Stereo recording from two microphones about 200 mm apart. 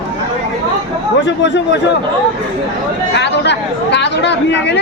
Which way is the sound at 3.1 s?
60° left (ahead or behind).